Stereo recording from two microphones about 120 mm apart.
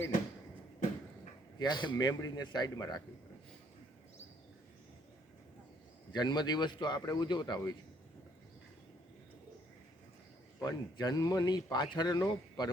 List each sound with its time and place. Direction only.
1.5 s speech: 35° left (ahead or behind)
6.1 s speech: 35° left (ahead or behind)
10.6 s speech: 35° left (ahead or behind)